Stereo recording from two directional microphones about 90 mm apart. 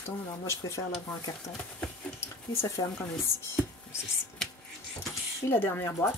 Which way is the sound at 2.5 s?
30° left (ahead or behind).